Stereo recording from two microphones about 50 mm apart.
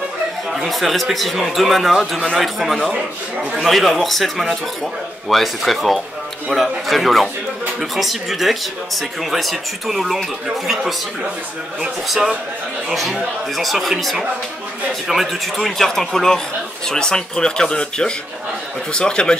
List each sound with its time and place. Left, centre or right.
0.5 s speech: centre
12.1 s speech: centre
12.9 s speech: centre